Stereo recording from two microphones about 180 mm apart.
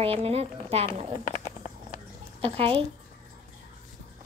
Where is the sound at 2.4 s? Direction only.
35° right (ahead or behind).